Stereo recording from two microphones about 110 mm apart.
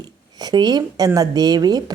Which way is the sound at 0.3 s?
40° right (ahead or behind).